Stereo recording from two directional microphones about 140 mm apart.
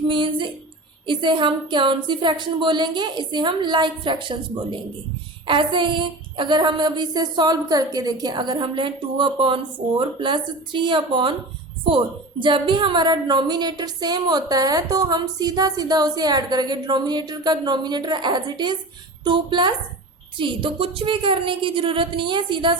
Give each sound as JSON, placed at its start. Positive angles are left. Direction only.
{"t": 0.1, "sound": "a woman's voice", "side_deg": -35}
{"t": 5.5, "sound": "a woman's voice", "side_deg": -35}